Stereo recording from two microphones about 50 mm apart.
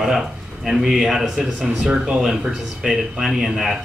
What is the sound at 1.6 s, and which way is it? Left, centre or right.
Speech, right.